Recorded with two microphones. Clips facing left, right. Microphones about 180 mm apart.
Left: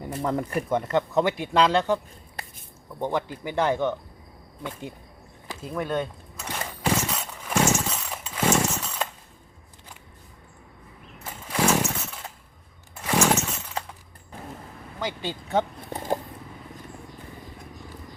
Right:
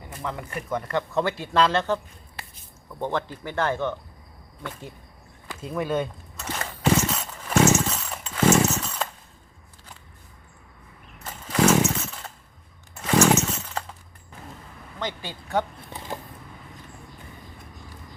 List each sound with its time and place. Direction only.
0.3 s speech: 40° left (ahead or behind)
0.7 s speech: 25° left (ahead or behind)
3.0 s speech: 10° left (ahead or behind)
5.6 s a sound: centre (ahead or behind)
6.9 s horse: centre (ahead or behind)
7.7 s chainsaw: 5° left (ahead or behind)
8.4 s chainsaw: 5° right (ahead or behind)
8.7 s chainsaw: 5° left (ahead or behind)
11.4 s chainsaw: 10° left (ahead or behind)
13.0 s chainsaw: 5° left (ahead or behind)
15.2 s speech: 20° left (ahead or behind)
15.9 s a sound: 45° left (ahead or behind)